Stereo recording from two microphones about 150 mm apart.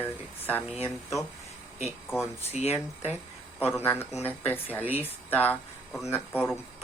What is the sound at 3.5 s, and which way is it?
Speech, 15° left (ahead or behind).